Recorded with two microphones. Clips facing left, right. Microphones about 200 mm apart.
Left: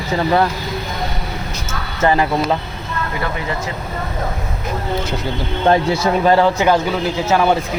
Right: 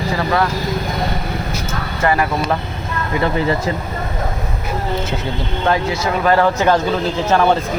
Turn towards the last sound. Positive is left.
turn(degrees=10)  # may be behind; listen again after turning